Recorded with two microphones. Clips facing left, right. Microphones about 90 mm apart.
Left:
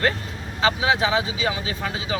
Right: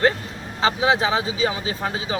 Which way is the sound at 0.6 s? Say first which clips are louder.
Right 1 dB; 35° right (ahead or behind).